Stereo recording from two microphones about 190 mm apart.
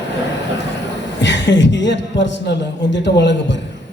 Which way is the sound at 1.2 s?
70° left (ahead or behind).